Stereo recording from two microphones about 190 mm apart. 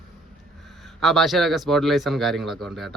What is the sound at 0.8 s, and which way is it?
Speech, centre (ahead or behind).